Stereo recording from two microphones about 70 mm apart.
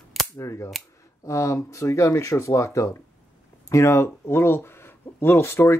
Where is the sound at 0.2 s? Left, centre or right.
Centre.